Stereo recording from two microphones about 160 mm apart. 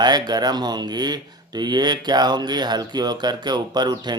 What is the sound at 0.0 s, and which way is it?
Speech, 25° right (ahead or behind).